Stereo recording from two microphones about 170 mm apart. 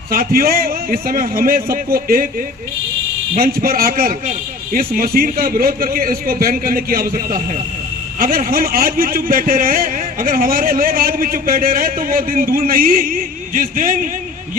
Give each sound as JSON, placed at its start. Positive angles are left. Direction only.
{"t": 0.1, "sound": "a man's voice", "side_deg": -60}
{"t": 3.3, "sound": "a man's voice", "side_deg": -60}
{"t": 8.2, "sound": "a man's voice", "side_deg": -55}